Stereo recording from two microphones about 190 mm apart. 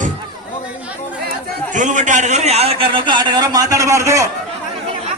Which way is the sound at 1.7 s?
40° right (ahead or behind).